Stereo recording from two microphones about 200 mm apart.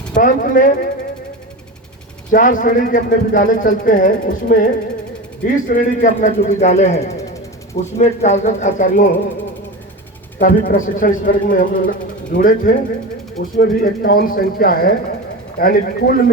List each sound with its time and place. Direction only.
0.2 s speech: 40° left (ahead or behind)
2.3 s speech: 40° left (ahead or behind)
10.4 s speech: 45° left (ahead or behind)